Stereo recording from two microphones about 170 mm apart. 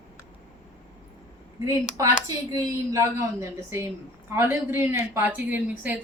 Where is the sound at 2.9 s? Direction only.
15° right (ahead or behind).